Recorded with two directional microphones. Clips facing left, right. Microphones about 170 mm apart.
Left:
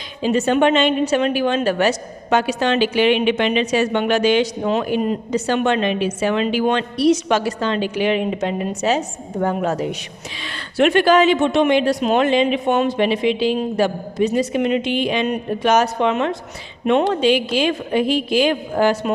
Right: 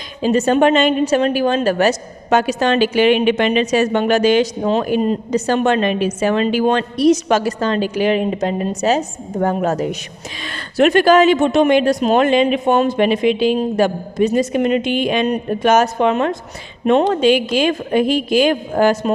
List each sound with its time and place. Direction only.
0.2 s a man's voice: 40° right (ahead or behind)